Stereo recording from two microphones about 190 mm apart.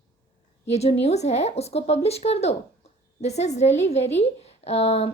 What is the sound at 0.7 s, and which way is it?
A woman's voice, 35° left (ahead or behind).